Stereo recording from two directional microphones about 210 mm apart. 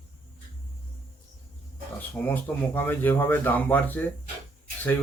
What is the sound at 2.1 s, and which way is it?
Speech, 10° left (ahead or behind).